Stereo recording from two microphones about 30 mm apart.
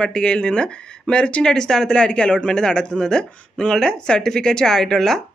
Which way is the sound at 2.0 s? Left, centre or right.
Left.